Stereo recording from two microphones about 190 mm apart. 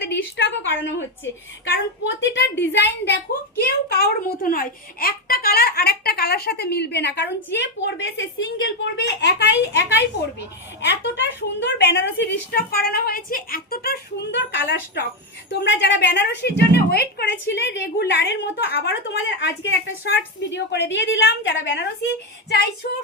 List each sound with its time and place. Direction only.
0.0 s a sound: 65° left (ahead or behind)
0.9 s a woman's voice: 75° left (ahead or behind)
3.6 s a child's voice: 60° left (ahead or behind); by 21.8 s 75° left (ahead or behind)